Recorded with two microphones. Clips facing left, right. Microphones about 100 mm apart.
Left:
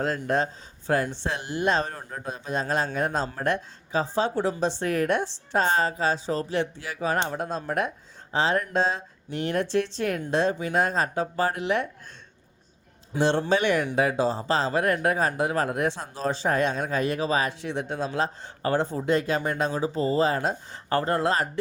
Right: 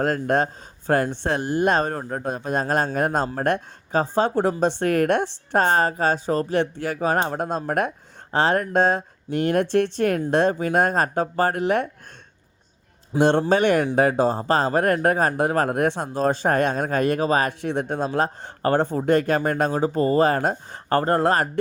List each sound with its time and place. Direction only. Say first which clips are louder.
0.0 s speech: right 4 dB; 50° right (ahead or behind)
13.1 s speech: right 5 dB; 50° right (ahead or behind)